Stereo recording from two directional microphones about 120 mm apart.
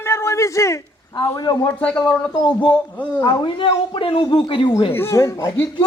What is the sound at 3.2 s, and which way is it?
A man's voice, 40° left (ahead or behind).